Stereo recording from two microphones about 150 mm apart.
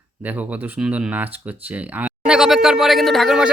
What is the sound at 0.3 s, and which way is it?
Speech, 10° right (ahead or behind).